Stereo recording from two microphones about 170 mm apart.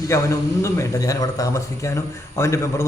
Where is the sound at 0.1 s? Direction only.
15° left (ahead or behind).